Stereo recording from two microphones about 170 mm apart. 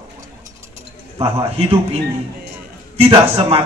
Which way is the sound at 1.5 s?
35° right (ahead or behind).